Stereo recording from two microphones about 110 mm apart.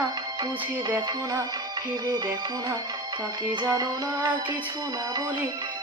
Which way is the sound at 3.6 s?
40° right (ahead or behind).